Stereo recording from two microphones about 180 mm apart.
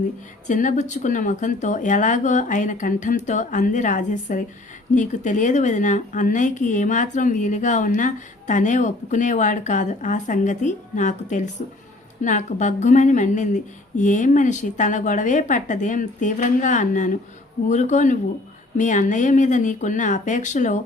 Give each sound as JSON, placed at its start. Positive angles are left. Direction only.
{"t": 0.4, "sound": "speech", "side_deg": 45}